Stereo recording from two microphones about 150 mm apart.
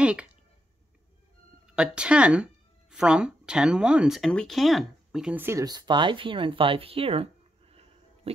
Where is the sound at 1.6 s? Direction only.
5° right (ahead or behind).